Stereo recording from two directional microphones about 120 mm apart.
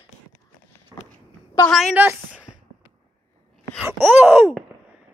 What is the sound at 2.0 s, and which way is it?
Groan, 15° right (ahead or behind).